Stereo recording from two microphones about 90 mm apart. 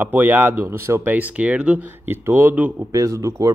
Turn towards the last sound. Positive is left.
turn(degrees=-35)  # may be behind; listen again after turning